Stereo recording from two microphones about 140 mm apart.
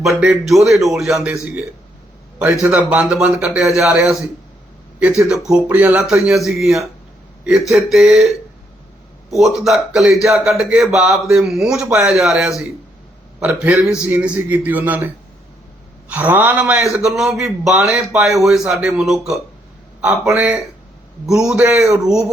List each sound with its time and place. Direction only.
0.0 s a man's voice: centre (ahead or behind)
9.6 s a man's voice: centre (ahead or behind)
21.2 s a man's voice: 5° right (ahead or behind)
21.8 s a man's voice: 20° right (ahead or behind)
22.0 s a man's voice: 5° right (ahead or behind)